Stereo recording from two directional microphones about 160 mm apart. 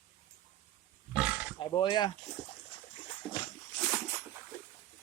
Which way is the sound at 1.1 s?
10° right (ahead or behind).